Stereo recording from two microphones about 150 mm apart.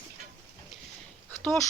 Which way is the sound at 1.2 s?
10° left (ahead or behind).